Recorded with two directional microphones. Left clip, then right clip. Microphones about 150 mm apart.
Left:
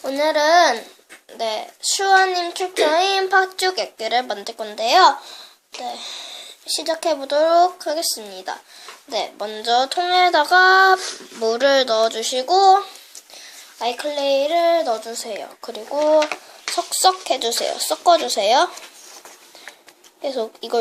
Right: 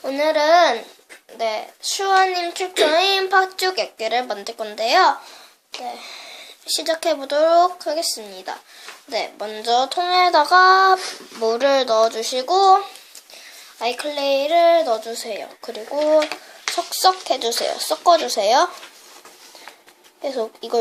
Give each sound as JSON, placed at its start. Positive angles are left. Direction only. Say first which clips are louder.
{"t": 0.0, "sound": "speech", "louder": "even", "side_deg": 5}
{"t": 5.8, "sound": "a sound", "louder": "left 3 dB", "side_deg": 15}
{"t": 6.7, "sound": "speech", "louder": "right 1 dB", "side_deg": 0}
{"t": 9.0, "sound": "child singing", "louder": "left 1 dB", "side_deg": 10}
{"t": 13.7, "sound": "speech", "louder": "left 1 dB", "side_deg": 5}
{"t": 20.2, "sound": "child singing", "louder": "even", "side_deg": 10}